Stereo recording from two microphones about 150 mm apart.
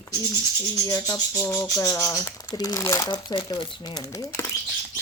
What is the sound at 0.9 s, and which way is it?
Speech, 25° left (ahead or behind).